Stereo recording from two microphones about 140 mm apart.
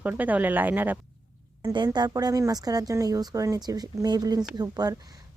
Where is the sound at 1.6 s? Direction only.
30° right (ahead or behind).